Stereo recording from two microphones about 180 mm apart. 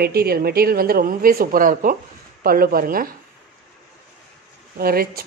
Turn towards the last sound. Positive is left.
turn(degrees=-55)  # may be behind; listen again after turning